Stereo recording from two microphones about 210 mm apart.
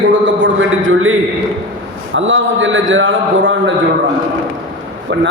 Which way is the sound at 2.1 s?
65° right (ahead or behind).